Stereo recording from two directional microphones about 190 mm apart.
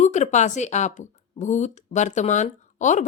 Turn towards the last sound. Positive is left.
turn(degrees=40)  # may be behind; listen again after turning